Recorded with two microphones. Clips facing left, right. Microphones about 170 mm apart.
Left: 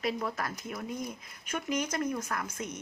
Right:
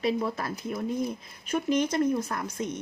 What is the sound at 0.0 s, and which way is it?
Speech, 25° right (ahead or behind).